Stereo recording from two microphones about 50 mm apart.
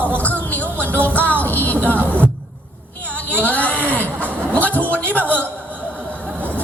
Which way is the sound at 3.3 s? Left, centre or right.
Left.